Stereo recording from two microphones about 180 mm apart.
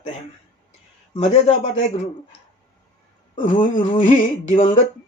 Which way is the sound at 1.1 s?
35° left (ahead or behind).